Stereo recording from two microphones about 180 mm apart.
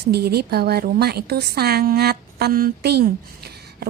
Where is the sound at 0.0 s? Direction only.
65° right (ahead or behind).